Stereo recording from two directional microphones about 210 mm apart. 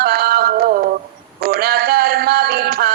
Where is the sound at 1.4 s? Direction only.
45° right (ahead or behind).